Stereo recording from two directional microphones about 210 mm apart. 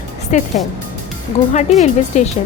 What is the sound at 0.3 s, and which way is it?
Speech, 35° left (ahead or behind).